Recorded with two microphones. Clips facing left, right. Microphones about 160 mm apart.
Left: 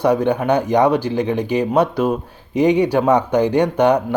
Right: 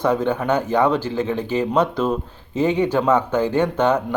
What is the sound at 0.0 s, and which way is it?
Speech, 15° left (ahead or behind).